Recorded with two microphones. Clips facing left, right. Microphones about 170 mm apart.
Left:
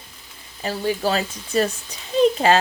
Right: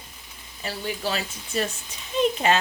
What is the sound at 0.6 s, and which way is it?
Speech, 40° left (ahead or behind).